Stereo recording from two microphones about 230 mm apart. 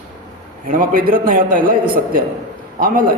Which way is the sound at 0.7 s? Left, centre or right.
Right.